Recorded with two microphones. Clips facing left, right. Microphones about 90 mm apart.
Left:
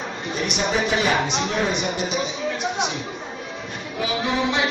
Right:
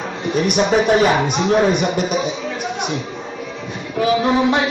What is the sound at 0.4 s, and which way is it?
Speech, 50° right (ahead or behind).